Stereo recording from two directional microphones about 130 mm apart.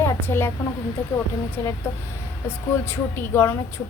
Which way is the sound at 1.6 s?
15° left (ahead or behind).